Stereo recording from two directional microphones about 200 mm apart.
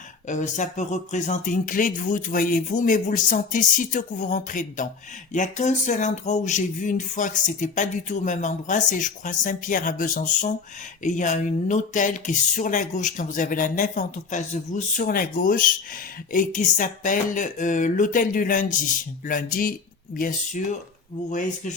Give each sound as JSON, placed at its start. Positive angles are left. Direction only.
{"t": 0.3, "sound": "speech", "side_deg": 40}